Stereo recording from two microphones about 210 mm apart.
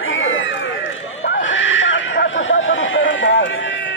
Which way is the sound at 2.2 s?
65° left (ahead or behind).